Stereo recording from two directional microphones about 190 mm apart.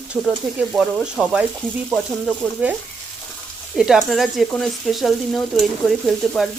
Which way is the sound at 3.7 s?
5° right (ahead or behind).